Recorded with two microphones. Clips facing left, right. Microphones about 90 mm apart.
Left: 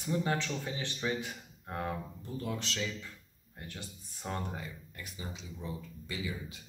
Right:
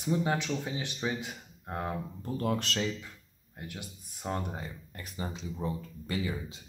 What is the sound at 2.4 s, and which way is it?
Speech, 55° right (ahead or behind).